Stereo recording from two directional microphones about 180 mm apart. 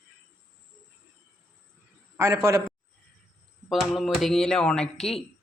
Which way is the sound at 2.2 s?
15° right (ahead or behind).